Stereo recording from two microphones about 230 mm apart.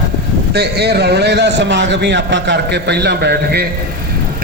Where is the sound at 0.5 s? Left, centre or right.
Right.